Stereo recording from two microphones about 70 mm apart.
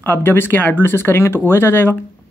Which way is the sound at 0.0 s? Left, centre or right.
Left.